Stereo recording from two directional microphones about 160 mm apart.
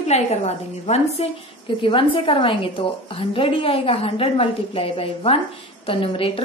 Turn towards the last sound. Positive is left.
turn(degrees=35)  # may be behind; listen again after turning